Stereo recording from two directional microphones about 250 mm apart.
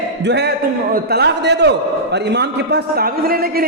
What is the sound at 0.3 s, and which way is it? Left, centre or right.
A man's voice, right.